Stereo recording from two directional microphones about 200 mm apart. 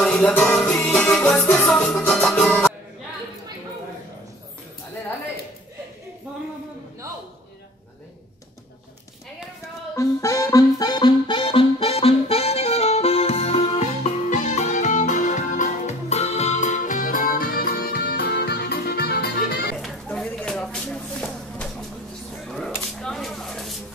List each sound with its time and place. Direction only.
0.0 s music: 5° left (ahead or behind)
9.9 s music: 15° left (ahead or behind); by 19.7 s 50° left (ahead or behind)
19.8 s a sound: centre (ahead or behind)